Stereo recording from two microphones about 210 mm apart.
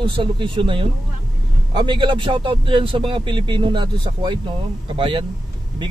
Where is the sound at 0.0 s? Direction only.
25° right (ahead or behind).